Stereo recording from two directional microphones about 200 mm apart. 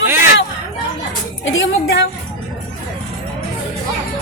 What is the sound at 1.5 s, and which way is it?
Speech, 70° left (ahead or behind).